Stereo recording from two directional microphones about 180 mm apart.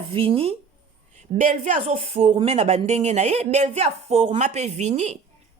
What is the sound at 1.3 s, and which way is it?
A woman's voice, 40° right (ahead or behind).